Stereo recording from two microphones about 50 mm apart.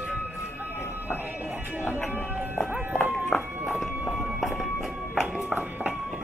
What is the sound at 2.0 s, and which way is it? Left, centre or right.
Speech, left.